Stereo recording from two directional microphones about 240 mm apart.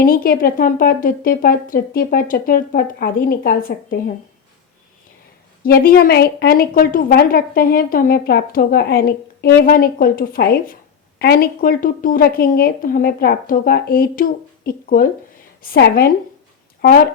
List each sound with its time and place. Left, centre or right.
0.0 s a woman's voice: left
5.6 s a woman's voice: left